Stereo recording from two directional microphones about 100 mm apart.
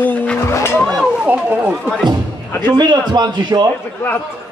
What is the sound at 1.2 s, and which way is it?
Speech, 15° right (ahead or behind).